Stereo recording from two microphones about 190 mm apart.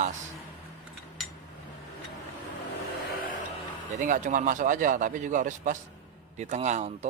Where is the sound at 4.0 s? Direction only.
45° right (ahead or behind).